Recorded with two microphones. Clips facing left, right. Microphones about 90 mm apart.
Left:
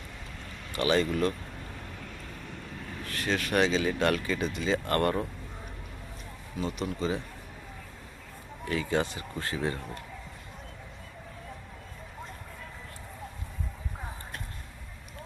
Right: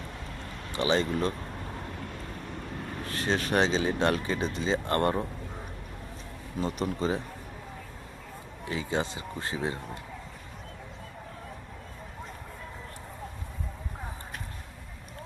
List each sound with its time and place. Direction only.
0.7 s a man's voice: 25° right (ahead or behind)
3.0 s speech: 30° right (ahead or behind)
6.6 s speech: 40° right (ahead or behind)
8.6 s a man's voice: 20° right (ahead or behind)